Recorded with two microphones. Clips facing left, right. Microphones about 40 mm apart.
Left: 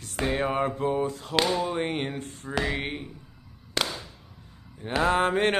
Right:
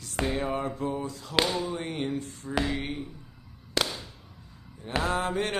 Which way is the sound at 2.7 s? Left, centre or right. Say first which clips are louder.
Left 2 dB; left.